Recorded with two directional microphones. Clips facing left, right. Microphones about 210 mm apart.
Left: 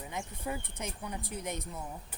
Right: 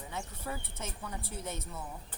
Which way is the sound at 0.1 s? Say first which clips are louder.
Left 2 dB; 15° left (ahead or behind).